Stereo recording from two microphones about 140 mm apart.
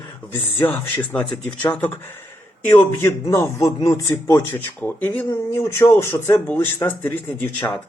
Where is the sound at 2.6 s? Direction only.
20° left (ahead or behind).